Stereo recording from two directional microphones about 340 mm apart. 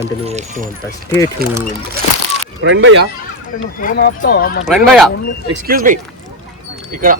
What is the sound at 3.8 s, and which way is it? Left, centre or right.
Speech, left.